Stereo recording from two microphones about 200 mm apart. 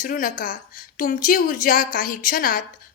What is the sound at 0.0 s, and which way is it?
A woman's voice, 45° left (ahead or behind).